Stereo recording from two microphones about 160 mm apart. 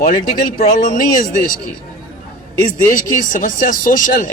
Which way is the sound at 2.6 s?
55° left (ahead or behind).